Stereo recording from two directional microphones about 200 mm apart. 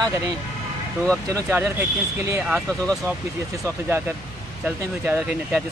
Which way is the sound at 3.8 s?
10° right (ahead or behind).